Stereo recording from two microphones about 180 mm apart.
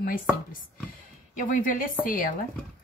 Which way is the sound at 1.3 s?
50° left (ahead or behind).